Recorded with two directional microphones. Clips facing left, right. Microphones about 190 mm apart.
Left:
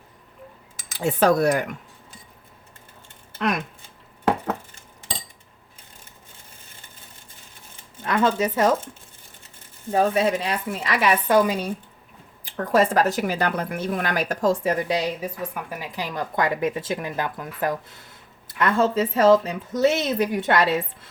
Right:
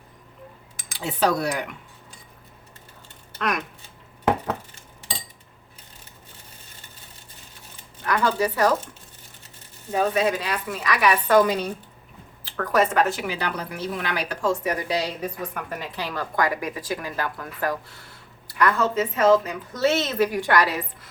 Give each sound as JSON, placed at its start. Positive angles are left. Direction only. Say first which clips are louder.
{"t": 0.9, "sound": "speech", "louder": "left 4 dB", "side_deg": 50}
{"t": 3.3, "sound": "speech", "louder": "left 2 dB", "side_deg": 25}
{"t": 8.0, "sound": "a woman's voice", "louder": "left 1 dB", "side_deg": 25}
{"t": 10.2, "sound": "a woman's voice", "louder": "left 1 dB", "side_deg": 25}
{"t": 11.3, "sound": "a woman's voice", "louder": "right 2 dB", "side_deg": 10}
{"t": 12.5, "sound": "a woman's voice", "louder": "left 2 dB", "side_deg": 25}
{"t": 15.2, "sound": "a woman's voice", "louder": "even", "side_deg": 5}
{"t": 19.7, "sound": "a woman's voice", "louder": "left 2 dB", "side_deg": 15}